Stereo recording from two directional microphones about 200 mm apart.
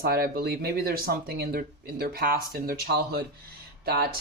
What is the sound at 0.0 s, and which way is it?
Speech, 50° right (ahead or behind).